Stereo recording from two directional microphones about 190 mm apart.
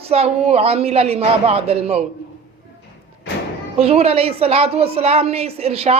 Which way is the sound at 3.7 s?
35° right (ahead or behind).